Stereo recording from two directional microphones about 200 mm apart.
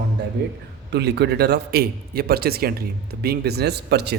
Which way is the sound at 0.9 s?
55° right (ahead or behind).